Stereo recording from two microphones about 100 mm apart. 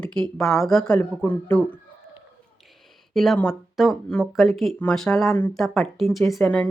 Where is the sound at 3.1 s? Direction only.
Centre (ahead or behind).